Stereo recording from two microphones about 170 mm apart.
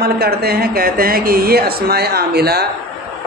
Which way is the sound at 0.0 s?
65° right (ahead or behind).